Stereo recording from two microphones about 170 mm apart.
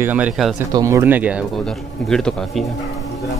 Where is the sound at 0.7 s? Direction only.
20° right (ahead or behind).